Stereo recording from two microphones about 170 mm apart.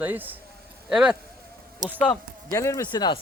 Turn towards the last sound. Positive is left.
turn(degrees=25)  # may be behind; listen again after turning